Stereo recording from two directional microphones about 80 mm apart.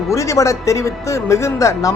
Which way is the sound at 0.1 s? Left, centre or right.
Left.